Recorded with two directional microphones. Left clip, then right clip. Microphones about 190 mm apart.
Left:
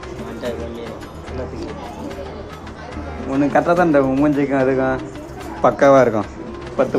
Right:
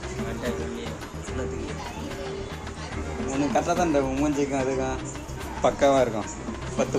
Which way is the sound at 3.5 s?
20° left (ahead or behind).